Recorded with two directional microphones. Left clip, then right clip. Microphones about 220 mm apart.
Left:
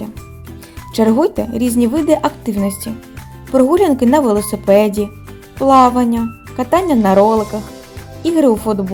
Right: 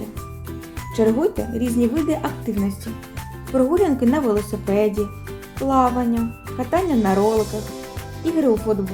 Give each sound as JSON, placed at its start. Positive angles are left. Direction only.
{"t": 0.9, "sound": "speech", "side_deg": 40}